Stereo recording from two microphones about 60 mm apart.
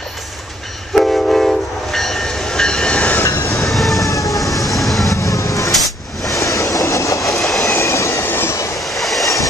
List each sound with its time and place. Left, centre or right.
0.9 s train: centre
3.4 s train: centre
5.1 s vehicle: left
5.7 s a sound: centre
6.4 s train: left
7.2 s train: centre
7.7 s train: left
8.3 s train: left
8.7 s vehicle: centre